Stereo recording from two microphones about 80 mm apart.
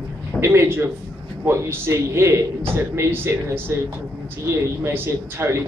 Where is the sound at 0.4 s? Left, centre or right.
Right.